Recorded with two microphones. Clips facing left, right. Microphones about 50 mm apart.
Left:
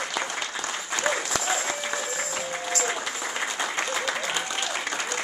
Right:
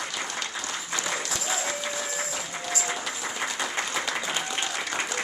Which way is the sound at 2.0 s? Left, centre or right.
Centre.